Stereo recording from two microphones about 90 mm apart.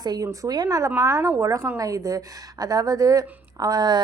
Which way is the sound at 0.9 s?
30° right (ahead or behind).